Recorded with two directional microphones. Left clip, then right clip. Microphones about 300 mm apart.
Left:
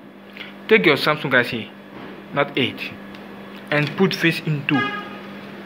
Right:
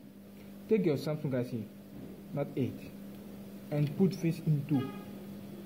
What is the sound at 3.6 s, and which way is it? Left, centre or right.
Speech, left.